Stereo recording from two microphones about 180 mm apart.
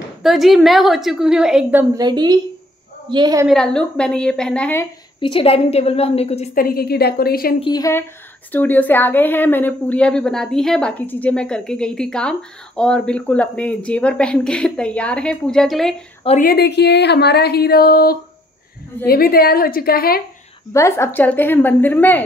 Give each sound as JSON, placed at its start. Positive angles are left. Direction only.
{"t": 0.2, "sound": "a woman's voice", "side_deg": 0}
{"t": 2.0, "sound": "a woman's voice", "side_deg": -25}
{"t": 3.4, "sound": "a woman's voice", "side_deg": 5}
{"t": 5.2, "sound": "a woman's voice", "side_deg": 30}
{"t": 6.5, "sound": "speech", "side_deg": 55}
{"t": 7.6, "sound": "a woman's voice", "side_deg": 20}
{"t": 8.5, "sound": "a woman's voice", "side_deg": 10}
{"t": 16.3, "sound": "speech", "side_deg": 50}
{"t": 20.7, "sound": "a woman's voice", "side_deg": 15}